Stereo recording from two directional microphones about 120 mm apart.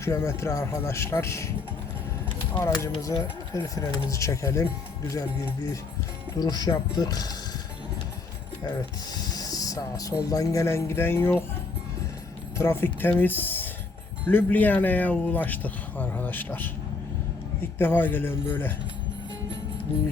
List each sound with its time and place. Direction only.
0.0 s speech: 25° left (ahead or behind)
2.7 s speech: 30° left (ahead or behind)
6.3 s speech: 35° left (ahead or behind)
9.1 s speech: 30° left (ahead or behind)
12.5 s speech: 20° left (ahead or behind)